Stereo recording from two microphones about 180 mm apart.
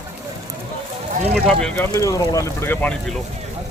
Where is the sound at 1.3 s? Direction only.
5° left (ahead or behind).